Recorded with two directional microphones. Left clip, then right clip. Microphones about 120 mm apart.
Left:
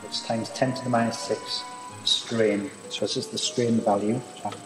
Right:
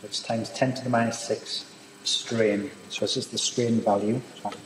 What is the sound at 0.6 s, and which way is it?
Speech, 15° right (ahead or behind).